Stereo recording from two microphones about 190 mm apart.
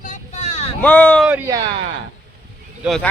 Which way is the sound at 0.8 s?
10° left (ahead or behind).